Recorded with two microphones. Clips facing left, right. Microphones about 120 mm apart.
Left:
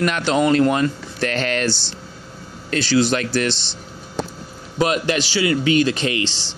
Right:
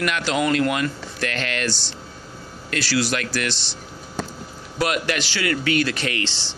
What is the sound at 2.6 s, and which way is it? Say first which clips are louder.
Speech: left 5 dB; 25° left (ahead or behind).